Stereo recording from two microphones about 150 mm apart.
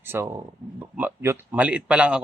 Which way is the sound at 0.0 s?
15° right (ahead or behind).